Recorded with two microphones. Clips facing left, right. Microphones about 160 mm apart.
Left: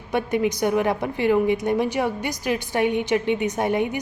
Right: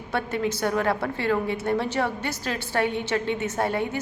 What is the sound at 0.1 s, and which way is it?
A woman's voice, 15° left (ahead or behind).